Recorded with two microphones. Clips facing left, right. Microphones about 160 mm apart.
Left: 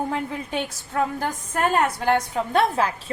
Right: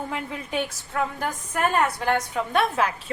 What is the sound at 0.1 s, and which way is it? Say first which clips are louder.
A woman's voice: left 3 dB; 30° left (ahead or behind).